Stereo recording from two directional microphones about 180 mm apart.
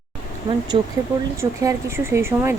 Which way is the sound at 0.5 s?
20° right (ahead or behind).